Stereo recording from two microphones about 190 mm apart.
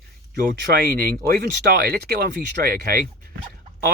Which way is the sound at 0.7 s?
55° right (ahead or behind).